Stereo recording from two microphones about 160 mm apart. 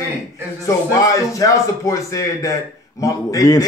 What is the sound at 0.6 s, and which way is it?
A man's voice, 20° left (ahead or behind).